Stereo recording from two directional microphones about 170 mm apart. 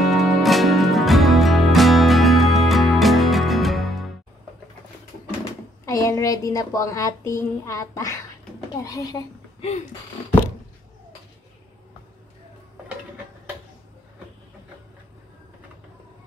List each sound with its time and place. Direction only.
0.0 s music: centre (ahead or behind)
5.9 s a woman's voice: 20° left (ahead or behind)